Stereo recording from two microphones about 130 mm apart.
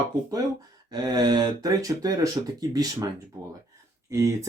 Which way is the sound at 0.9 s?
30° right (ahead or behind).